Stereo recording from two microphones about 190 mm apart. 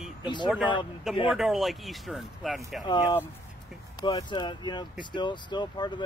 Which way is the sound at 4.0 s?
20° left (ahead or behind).